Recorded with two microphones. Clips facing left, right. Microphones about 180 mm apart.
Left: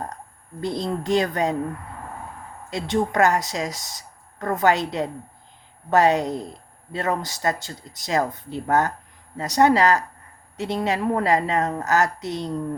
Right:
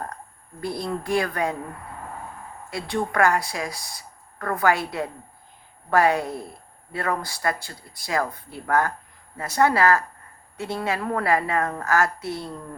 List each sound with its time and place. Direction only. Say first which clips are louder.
0.6 s a woman's voice: left 2 dB; 20° left (ahead or behind)
2.6 s a woman's voice: left 4 dB; 20° left (ahead or behind)